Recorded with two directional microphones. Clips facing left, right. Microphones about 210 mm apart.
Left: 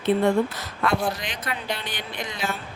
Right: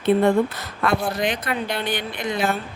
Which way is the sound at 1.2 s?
55° right (ahead or behind).